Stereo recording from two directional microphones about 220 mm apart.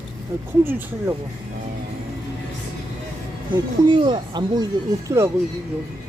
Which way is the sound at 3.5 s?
20° right (ahead or behind).